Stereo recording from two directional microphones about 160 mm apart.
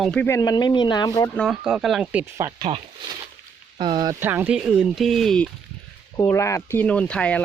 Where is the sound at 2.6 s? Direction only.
40° right (ahead or behind).